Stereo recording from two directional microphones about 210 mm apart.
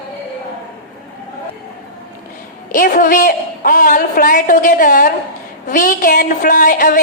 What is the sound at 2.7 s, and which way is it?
A woman's voice, 40° left (ahead or behind).